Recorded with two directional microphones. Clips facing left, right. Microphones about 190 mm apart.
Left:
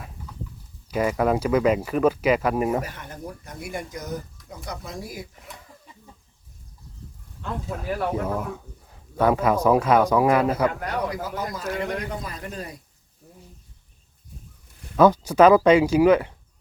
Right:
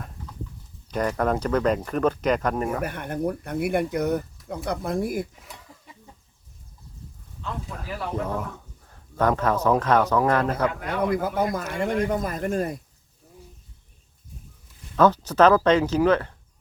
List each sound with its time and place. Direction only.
0.9 s speech: 5° left (ahead or behind)
2.8 s speech: 55° right (ahead or behind)
7.8 s speech: 5° left (ahead or behind)
10.8 s speech: 55° right (ahead or behind)
14.9 s speech: 10° left (ahead or behind)